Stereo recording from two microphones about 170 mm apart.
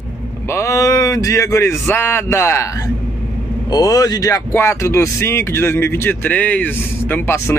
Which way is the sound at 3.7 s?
20° left (ahead or behind).